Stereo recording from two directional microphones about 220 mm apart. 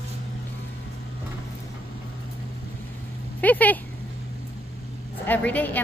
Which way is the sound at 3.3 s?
5° left (ahead or behind).